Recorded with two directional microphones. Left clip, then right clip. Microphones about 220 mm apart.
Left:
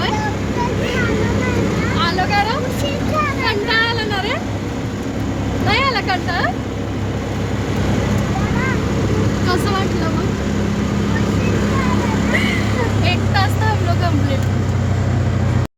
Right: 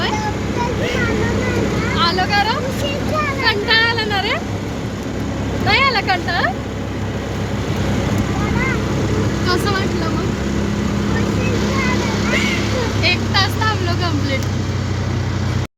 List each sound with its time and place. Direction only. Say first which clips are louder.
2.0 s vehicle: right 1 dB; 15° right (ahead or behind)
5.6 s vehicle: right 2 dB; 15° right (ahead or behind)
13.1 s vehicle: right 4 dB; 10° right (ahead or behind)